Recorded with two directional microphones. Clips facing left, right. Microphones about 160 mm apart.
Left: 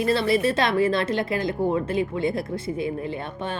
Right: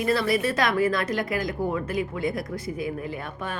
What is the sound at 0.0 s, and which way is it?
A woman's voice, 25° left (ahead or behind).